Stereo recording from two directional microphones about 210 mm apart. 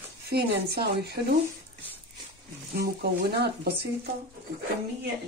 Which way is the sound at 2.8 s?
50° right (ahead or behind).